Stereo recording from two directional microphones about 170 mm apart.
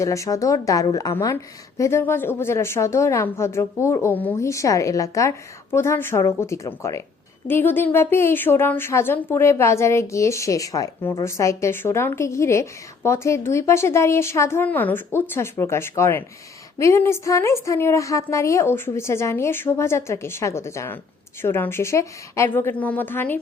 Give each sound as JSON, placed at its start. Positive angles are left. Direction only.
{"t": 0.0, "sound": "a woman's voice", "side_deg": 20}